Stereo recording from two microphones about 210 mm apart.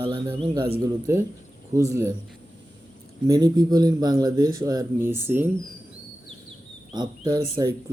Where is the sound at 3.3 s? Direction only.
15° right (ahead or behind).